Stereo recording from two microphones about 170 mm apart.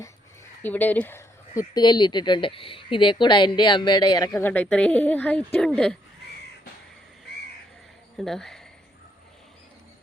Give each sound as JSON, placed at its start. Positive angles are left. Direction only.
{"t": 0.6, "sound": "speech", "side_deg": 10}
{"t": 4.4, "sound": "a woman's voice", "side_deg": 10}
{"t": 8.2, "sound": "speech", "side_deg": 0}